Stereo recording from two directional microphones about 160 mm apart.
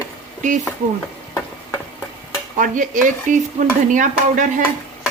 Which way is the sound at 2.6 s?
55° right (ahead or behind).